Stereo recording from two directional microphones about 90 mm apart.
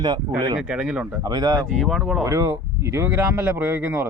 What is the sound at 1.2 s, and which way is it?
Speech, 50° right (ahead or behind).